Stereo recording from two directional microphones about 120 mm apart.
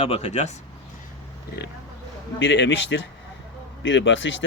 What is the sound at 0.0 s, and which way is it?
Speech, 60° left (ahead or behind).